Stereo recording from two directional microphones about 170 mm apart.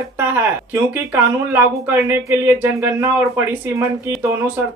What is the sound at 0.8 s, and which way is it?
Speech, 10° right (ahead or behind).